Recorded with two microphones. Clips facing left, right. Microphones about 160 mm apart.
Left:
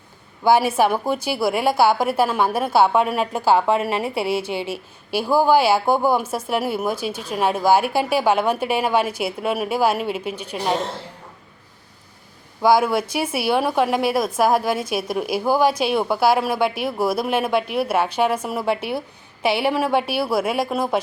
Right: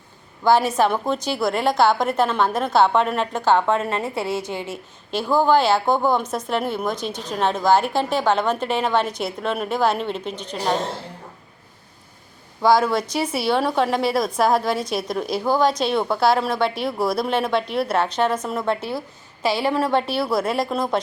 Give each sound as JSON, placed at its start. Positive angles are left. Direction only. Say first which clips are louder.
{"t": 0.4, "sound": "a woman's voice", "louder": "left 1 dB", "side_deg": 10}
{"t": 4.2, "sound": "a woman's voice", "louder": "left 3 dB", "side_deg": 25}
{"t": 5.1, "sound": "a woman's voice", "louder": "left 1 dB", "side_deg": 10}
{"t": 12.6, "sound": "a woman's voice", "louder": "left 1 dB", "side_deg": 5}